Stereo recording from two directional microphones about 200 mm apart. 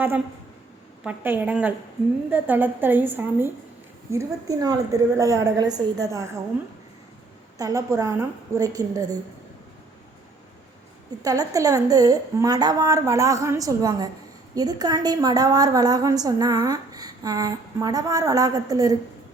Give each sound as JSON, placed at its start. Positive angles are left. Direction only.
{"t": 1.0, "sound": "a woman's voice", "side_deg": -10}
{"t": 7.6, "sound": "a woman's voice", "side_deg": -15}
{"t": 11.2, "sound": "a woman's voice", "side_deg": -15}